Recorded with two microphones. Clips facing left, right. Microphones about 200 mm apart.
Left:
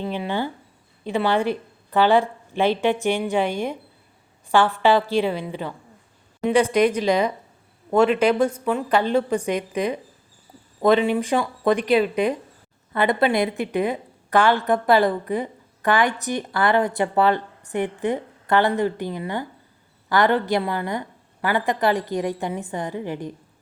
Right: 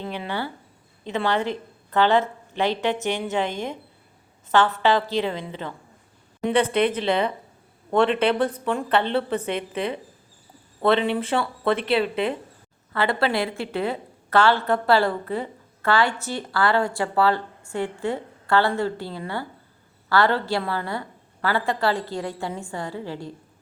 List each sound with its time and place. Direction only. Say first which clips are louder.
0.0 s a woman's voice: left 4 dB; 15° left (ahead or behind)
3.4 s speech: left 4 dB; 20° right (ahead or behind)
4.8 s a woman's voice: left 3 dB; 15° left (ahead or behind)